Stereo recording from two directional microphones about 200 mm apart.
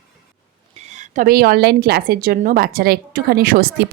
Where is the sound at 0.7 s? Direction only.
35° right (ahead or behind).